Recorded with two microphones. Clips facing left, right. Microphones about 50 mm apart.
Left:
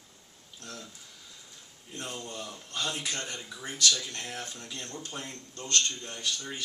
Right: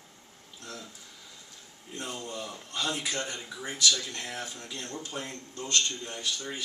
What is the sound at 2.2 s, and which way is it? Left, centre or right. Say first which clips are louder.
Speech: right 2 dB; centre.